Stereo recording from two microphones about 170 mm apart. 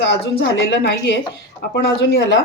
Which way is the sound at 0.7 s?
85° left.